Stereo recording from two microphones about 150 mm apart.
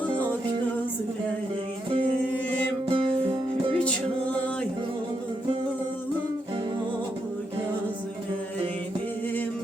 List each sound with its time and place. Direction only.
2.9 s music: 35° right (ahead or behind)
3.8 s music: 10° left (ahead or behind)